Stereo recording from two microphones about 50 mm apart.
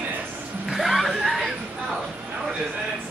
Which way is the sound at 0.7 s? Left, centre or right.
Centre.